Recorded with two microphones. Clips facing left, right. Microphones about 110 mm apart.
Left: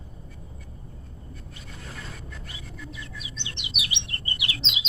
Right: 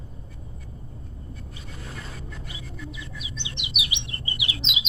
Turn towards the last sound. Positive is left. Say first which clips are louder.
# right 1 dB
turn(degrees=-15)  # may be behind; listen again after turning